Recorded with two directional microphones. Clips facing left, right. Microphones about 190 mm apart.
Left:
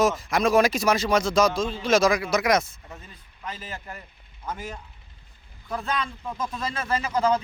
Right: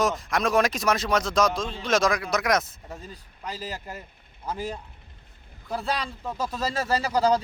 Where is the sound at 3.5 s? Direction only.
40° right (ahead or behind).